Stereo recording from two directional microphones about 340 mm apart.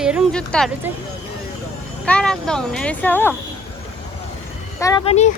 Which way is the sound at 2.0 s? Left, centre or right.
Centre.